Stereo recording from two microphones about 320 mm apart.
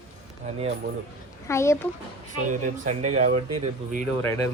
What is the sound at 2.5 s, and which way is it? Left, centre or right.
Speech, right.